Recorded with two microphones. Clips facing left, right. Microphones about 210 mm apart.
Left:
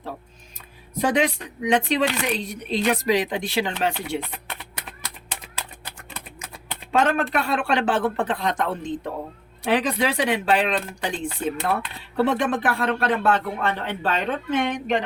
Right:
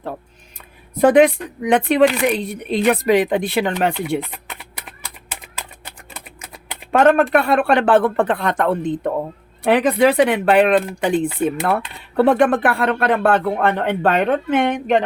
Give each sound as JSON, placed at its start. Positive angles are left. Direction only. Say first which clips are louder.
{"t": 0.9, "sound": "speech", "louder": "right 10 dB", "side_deg": -55}
{"t": 6.9, "sound": "speech", "louder": "right 8 dB", "side_deg": -55}